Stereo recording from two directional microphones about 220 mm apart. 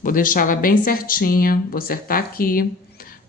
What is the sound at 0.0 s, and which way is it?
A woman's voice, 40° left (ahead or behind).